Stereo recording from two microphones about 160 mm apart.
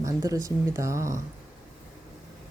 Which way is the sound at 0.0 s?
20° right (ahead or behind).